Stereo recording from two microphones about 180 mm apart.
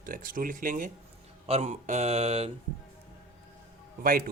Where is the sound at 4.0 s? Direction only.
55° right (ahead or behind).